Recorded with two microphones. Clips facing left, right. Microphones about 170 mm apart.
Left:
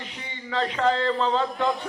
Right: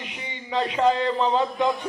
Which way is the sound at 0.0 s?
15° right (ahead or behind).